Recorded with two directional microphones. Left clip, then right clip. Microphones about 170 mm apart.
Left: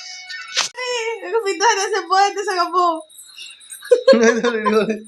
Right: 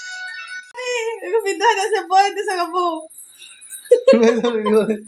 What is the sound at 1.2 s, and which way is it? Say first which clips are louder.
Speech: even; 5° right (ahead or behind).